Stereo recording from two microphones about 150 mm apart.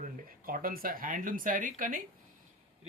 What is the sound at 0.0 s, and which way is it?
Speech, 70° right (ahead or behind).